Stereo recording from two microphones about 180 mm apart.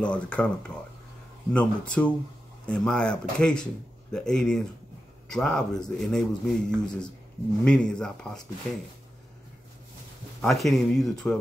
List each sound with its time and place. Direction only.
0.0 s speech: 5° left (ahead or behind)
10.4 s speech: centre (ahead or behind)